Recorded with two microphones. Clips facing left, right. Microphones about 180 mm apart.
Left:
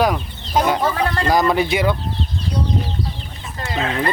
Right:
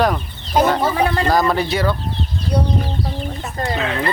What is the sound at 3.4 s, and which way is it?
Chicken, 40° right (ahead or behind).